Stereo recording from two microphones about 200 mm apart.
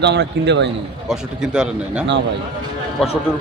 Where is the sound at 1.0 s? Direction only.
5° right (ahead or behind).